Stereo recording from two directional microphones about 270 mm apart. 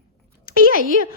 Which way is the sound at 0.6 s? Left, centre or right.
Right.